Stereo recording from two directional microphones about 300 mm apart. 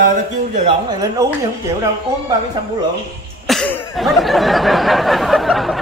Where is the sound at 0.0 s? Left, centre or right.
Right.